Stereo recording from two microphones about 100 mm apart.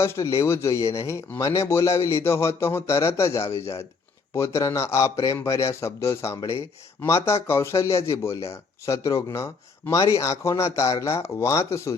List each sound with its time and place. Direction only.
0.0 s speech: 30° left (ahead or behind)